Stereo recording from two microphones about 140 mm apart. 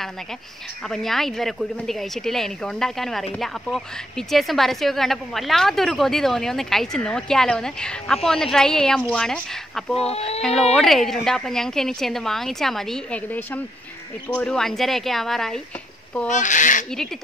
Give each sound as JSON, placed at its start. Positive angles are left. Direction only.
{"t": 0.8, "sound": "a woman's voice", "side_deg": 0}
{"t": 9.9, "sound": "speech", "side_deg": 45}
{"t": 10.7, "sound": "a woman's voice", "side_deg": 0}
{"t": 16.3, "sound": "speech", "side_deg": 65}